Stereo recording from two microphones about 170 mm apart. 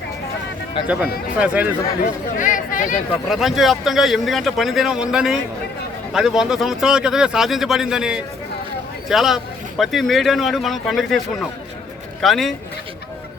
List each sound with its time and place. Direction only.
0.8 s speech: 30° left (ahead or behind)
1.4 s speech: 5° right (ahead or behind)
2.4 s speech: 50° left (ahead or behind)
3.2 s a man's voice: centre (ahead or behind)